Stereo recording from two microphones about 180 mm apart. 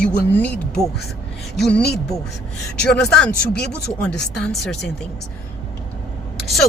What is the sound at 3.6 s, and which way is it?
Speech, 65° left (ahead or behind).